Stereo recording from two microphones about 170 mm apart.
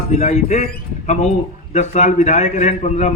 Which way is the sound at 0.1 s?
40° left (ahead or behind).